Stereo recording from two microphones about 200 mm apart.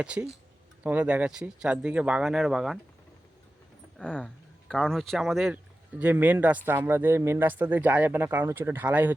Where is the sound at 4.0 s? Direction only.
5° left (ahead or behind).